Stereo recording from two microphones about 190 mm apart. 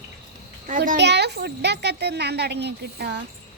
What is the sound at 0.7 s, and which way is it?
Speech, 45° right (ahead or behind).